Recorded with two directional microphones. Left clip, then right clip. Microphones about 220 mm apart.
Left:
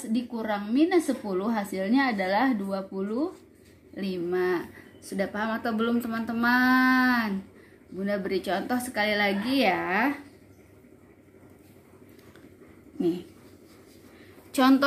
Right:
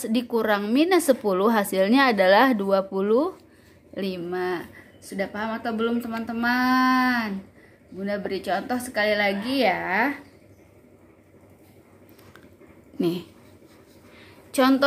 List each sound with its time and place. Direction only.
0.1 s a woman's voice: 30° right (ahead or behind)
3.9 s a woman's voice: 15° right (ahead or behind)
14.5 s a woman's voice: 10° right (ahead or behind)